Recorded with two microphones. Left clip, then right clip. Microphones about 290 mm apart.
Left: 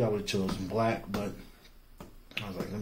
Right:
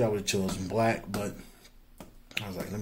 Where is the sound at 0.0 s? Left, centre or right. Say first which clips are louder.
Right 2 dB; right.